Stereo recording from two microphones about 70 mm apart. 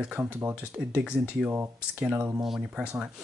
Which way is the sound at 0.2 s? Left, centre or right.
Right.